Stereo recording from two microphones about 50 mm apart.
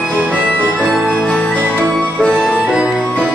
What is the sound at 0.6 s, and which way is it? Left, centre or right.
Music, centre.